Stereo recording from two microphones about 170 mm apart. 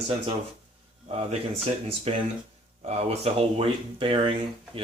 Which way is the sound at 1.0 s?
40° right (ahead or behind).